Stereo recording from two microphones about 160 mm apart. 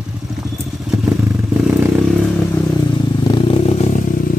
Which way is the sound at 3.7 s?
45° left (ahead or behind).